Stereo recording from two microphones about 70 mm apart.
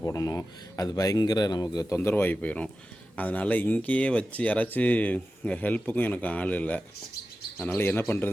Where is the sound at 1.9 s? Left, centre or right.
Left.